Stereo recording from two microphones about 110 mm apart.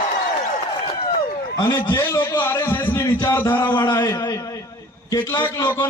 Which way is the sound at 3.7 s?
45° left (ahead or behind).